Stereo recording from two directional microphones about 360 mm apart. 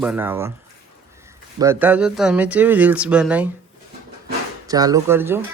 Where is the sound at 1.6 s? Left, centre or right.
Centre.